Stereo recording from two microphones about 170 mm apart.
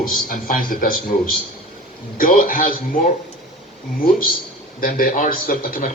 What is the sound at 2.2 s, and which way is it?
Speech, 55° left (ahead or behind).